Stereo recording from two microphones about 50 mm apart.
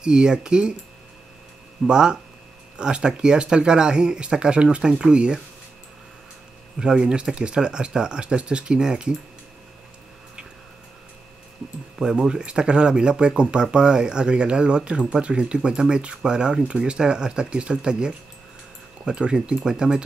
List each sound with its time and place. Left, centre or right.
0.0 s speech: centre
1.9 s speech: centre
6.8 s speech: centre
12.0 s speech: centre